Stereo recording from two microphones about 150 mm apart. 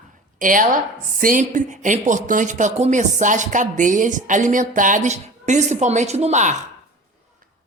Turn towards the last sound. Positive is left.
turn(degrees=-50)  # may be behind; listen again after turning